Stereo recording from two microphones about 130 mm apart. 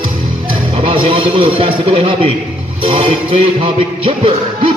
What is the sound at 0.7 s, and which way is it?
Speech, 45° right (ahead or behind).